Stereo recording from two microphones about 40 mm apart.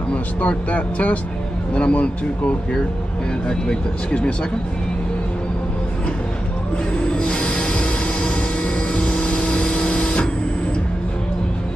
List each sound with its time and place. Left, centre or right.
0.1 s speech: left
3.4 s speech: left
7.0 s music: left